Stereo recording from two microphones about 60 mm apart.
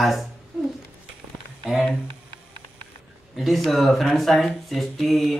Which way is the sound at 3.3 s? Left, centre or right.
Centre.